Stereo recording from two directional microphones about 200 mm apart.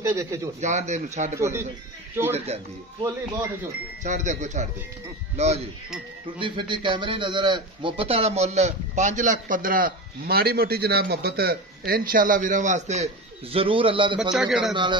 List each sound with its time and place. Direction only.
0.1 s speech: 15° right (ahead or behind)
0.6 s a man's voice: 35° right (ahead or behind)
1.3 s speech: 15° right (ahead or behind)
2.3 s a man's voice: 30° right (ahead or behind)
14.3 s a man's voice: centre (ahead or behind)